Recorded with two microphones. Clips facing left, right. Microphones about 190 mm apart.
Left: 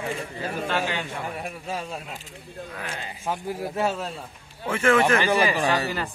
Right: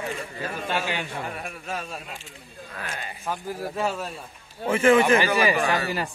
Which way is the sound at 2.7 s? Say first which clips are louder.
Right 1 dB; 10° left (ahead or behind).